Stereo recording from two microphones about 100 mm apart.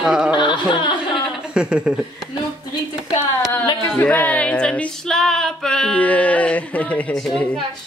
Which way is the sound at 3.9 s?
15° left (ahead or behind).